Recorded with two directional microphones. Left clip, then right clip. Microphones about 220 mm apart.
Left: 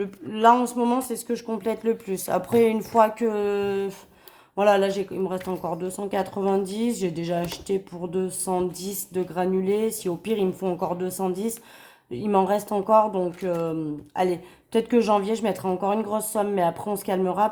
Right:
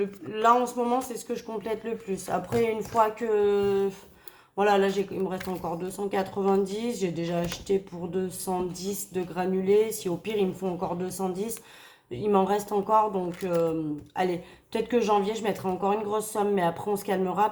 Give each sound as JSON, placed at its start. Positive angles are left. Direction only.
{"t": 0.0, "sound": "speech", "side_deg": 45}